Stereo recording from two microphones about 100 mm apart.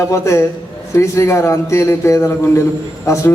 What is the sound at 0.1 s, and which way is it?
A man's voice, 30° left (ahead or behind).